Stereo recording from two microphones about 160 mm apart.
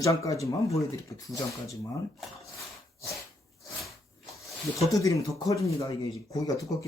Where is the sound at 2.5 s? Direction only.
20° left (ahead or behind).